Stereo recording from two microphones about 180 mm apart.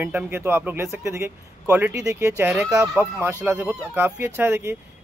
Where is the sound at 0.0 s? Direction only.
10° right (ahead or behind).